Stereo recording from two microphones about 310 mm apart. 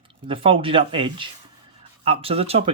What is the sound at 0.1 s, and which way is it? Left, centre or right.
Speech, centre.